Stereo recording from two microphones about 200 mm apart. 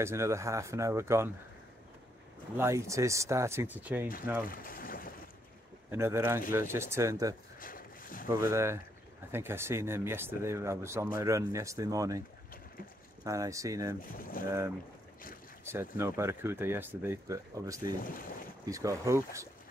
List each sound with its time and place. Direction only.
0.0 s speech: 15° right (ahead or behind)
2.5 s speech: 15° right (ahead or behind)
4.5 s boat: 45° left (ahead or behind)
5.9 s speech: 10° right (ahead or behind)
7.6 s a sound: 45° left (ahead or behind)
8.3 s speech: 15° right (ahead or behind)
13.2 s speech: 15° right (ahead or behind)
14.1 s speech: 45° left (ahead or behind)
15.6 s speech: 10° right (ahead or behind)
17.8 s speech: 45° left (ahead or behind)
18.7 s speech: 15° right (ahead or behind)